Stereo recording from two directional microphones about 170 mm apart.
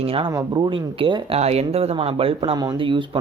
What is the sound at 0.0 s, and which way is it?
Speech, 35° right (ahead or behind).